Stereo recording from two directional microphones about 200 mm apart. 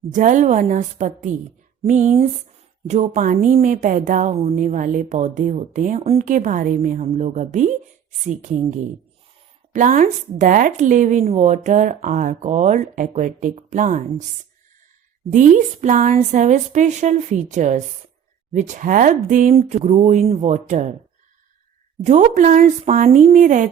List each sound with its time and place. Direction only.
0.1 s a woman's voice: 40° right (ahead or behind)
15.3 s a woman's voice: 40° right (ahead or behind)
22.0 s a woman's voice: 35° right (ahead or behind)